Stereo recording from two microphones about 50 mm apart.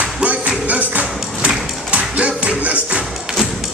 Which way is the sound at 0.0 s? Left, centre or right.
Right.